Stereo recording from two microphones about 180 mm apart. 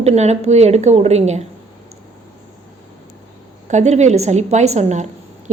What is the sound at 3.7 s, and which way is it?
A woman's voice, 40° right (ahead or behind).